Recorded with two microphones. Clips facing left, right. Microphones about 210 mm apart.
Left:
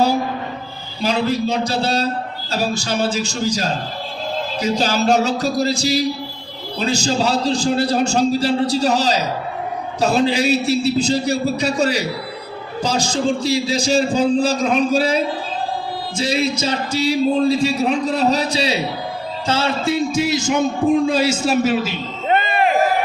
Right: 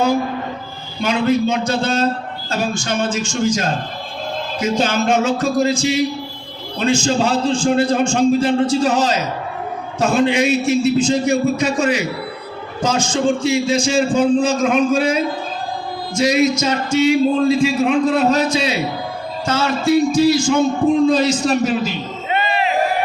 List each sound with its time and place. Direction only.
1.0 s a man's voice: 35° left (ahead or behind)
21.1 s a man's voice: 10° left (ahead or behind)
22.3 s a sound: 50° left (ahead or behind)